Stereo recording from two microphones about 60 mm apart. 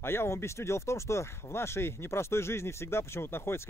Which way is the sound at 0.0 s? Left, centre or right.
Left.